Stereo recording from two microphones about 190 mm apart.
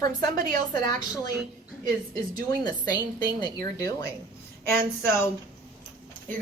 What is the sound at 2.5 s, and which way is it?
A woman's voice, 20° left (ahead or behind).